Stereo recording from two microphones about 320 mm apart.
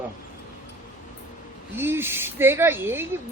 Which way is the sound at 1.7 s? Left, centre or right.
Centre.